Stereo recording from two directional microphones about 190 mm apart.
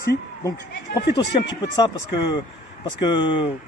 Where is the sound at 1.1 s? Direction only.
20° left (ahead or behind).